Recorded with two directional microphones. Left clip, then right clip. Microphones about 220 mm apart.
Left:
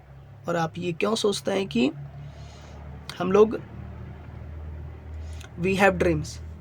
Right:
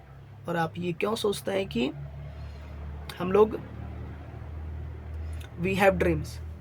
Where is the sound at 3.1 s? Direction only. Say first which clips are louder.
Left 3 dB; 35° left (ahead or behind).